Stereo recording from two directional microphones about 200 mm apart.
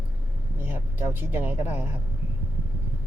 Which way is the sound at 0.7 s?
10° right (ahead or behind).